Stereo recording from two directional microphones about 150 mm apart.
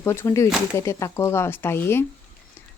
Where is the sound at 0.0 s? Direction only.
20° left (ahead or behind).